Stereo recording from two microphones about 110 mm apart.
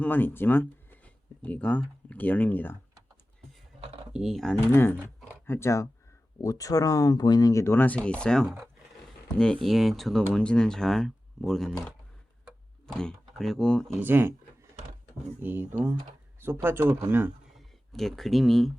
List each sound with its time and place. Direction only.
0.0 s speech: 15° left (ahead or behind)
4.1 s speech: centre (ahead or behind)
4.7 s speech: 20° left (ahead or behind); by 11.7 s 5° left (ahead or behind)
12.9 s speech: 5° left (ahead or behind)
14.0 s speech: 20° right (ahead or behind)
15.4 s speech: 20° right (ahead or behind)
17.6 s speech: centre (ahead or behind)